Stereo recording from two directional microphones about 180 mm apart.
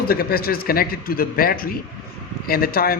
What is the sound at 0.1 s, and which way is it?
A man's voice, 55° left (ahead or behind).